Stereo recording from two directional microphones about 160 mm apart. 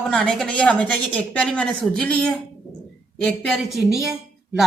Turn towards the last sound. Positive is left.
turn(degrees=0)  # may be behind; listen again after turning